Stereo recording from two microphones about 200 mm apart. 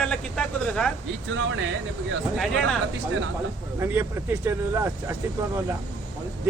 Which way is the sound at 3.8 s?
10° right (ahead or behind).